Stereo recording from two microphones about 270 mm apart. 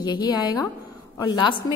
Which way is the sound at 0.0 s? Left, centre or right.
Centre.